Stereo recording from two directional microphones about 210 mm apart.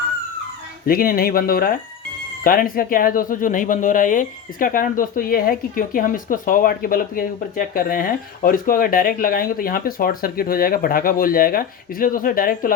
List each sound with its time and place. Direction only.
0.9 s speech: 45° left (ahead or behind)